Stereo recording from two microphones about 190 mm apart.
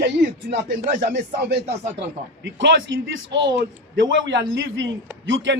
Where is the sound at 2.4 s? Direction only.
70° right (ahead or behind).